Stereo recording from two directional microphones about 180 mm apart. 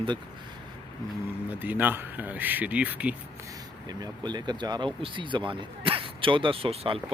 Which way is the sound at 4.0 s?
25° right (ahead or behind).